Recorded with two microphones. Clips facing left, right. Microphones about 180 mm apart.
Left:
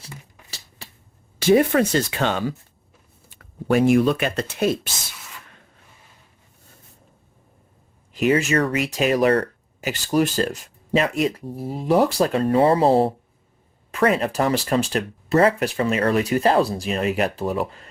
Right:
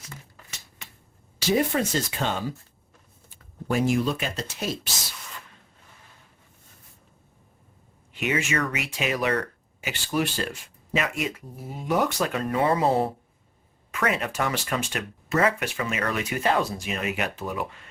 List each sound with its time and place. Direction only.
0.8 s a sound: 35° left (ahead or behind)
1.4 s speech: 60° left (ahead or behind)
8.1 s speech: 35° left (ahead or behind)